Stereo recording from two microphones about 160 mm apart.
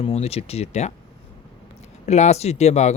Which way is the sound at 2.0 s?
45° left (ahead or behind).